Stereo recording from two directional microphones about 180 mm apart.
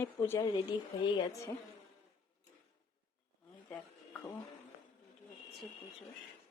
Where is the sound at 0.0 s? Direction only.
15° left (ahead or behind).